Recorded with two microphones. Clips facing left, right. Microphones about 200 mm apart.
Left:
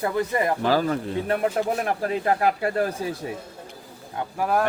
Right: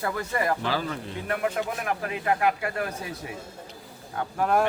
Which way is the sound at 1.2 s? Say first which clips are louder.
Left 3 dB; 30° left (ahead or behind).